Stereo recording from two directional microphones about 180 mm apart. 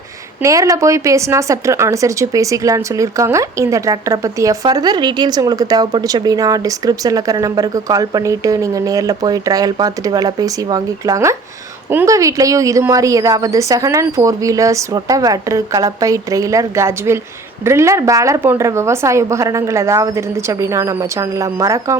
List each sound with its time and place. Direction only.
0.4 s speech: 20° right (ahead or behind)